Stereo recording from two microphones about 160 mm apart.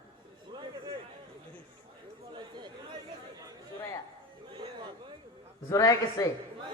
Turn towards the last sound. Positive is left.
turn(degrees=20)  # may be behind; listen again after turning